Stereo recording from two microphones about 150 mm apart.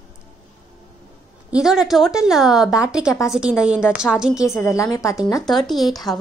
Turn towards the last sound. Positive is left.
turn(degrees=0)  # may be behind; listen again after turning